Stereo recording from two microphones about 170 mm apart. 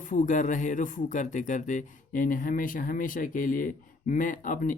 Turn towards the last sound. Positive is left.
turn(degrees=50)  # may be behind; listen again after turning